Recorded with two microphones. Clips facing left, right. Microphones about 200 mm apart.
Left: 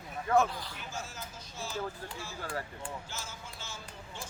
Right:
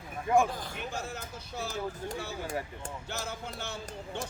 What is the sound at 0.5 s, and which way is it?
A man's voice, 50° right (ahead or behind).